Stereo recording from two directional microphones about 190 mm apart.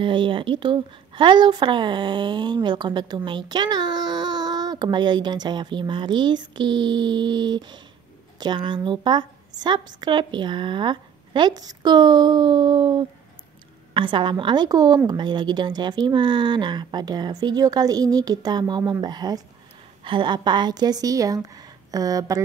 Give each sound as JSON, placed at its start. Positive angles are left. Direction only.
{"t": 0.0, "sound": "a child's voice", "side_deg": -25}